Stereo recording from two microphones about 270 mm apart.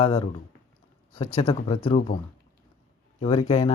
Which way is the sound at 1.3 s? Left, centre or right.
Centre.